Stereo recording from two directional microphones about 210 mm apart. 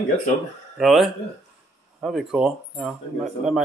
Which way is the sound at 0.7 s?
Centre (ahead or behind).